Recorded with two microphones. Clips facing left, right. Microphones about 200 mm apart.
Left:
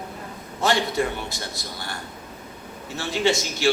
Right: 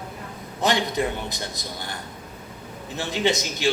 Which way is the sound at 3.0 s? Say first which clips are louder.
Left 1 dB; 20° right (ahead or behind).